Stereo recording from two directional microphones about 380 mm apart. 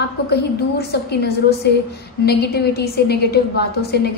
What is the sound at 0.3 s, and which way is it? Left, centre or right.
A woman's voice, left.